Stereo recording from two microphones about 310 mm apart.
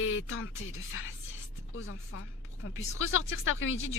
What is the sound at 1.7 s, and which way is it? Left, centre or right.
Speech, left.